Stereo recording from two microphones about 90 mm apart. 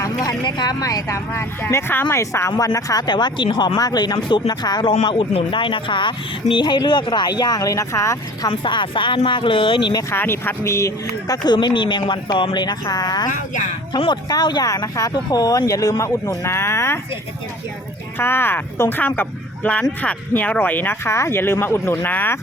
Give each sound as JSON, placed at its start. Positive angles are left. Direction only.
{"t": 0.0, "sound": "vehicle", "side_deg": 40}
{"t": 0.4, "sound": "speech", "side_deg": 50}
{"t": 3.1, "sound": "speech", "side_deg": 55}
{"t": 8.4, "sound": "speech", "side_deg": 65}
{"t": 10.1, "sound": "speech", "side_deg": 25}
{"t": 11.4, "sound": "speech", "side_deg": 55}
{"t": 18.2, "sound": "speech", "side_deg": 25}